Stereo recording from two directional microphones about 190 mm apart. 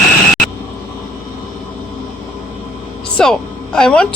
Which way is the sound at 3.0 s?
5° left (ahead or behind).